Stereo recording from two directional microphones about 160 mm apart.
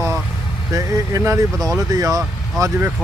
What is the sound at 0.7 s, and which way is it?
Speech, 20° right (ahead or behind).